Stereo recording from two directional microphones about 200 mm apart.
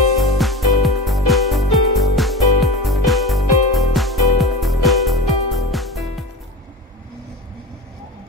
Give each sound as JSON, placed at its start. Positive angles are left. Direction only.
{"t": 0.2, "sound": "music", "side_deg": 0}